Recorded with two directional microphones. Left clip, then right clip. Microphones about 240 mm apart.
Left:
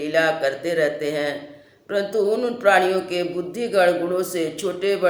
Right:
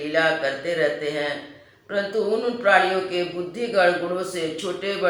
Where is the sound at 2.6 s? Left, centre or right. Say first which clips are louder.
Left 1 dB; left.